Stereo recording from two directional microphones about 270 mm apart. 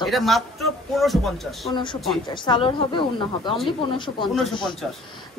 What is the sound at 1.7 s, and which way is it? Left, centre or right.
A woman's voice, centre.